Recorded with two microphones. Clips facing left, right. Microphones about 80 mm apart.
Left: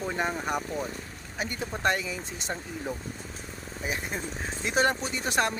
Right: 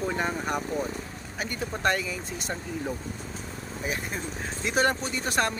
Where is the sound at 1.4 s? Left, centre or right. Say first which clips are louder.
Right 1 dB; left.